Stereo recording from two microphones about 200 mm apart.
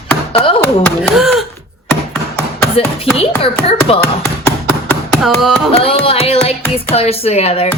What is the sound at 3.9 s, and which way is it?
Speech, 30° left (ahead or behind).